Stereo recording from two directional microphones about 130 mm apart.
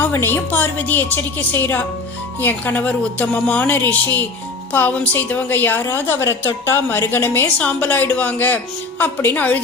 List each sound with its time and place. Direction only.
0.0 s a woman's voice: 15° left (ahead or behind)